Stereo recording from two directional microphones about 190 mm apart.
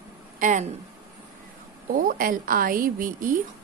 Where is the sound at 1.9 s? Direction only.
45° right (ahead or behind).